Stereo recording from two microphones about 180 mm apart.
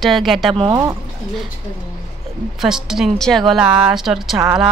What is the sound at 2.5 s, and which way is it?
Speech, 5° right (ahead or behind).